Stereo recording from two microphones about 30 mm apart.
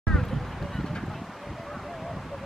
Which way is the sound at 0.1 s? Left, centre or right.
Centre.